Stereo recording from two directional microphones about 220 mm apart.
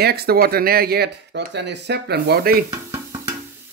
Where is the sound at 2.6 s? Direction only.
15° right (ahead or behind).